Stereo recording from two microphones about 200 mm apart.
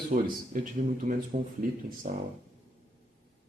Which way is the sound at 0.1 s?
40° right (ahead or behind).